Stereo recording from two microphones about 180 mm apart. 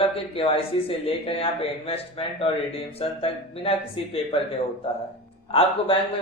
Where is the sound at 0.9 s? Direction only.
30° left (ahead or behind).